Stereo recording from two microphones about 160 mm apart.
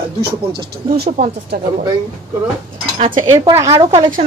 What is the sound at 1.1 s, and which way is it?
Speech, 50° right (ahead or behind).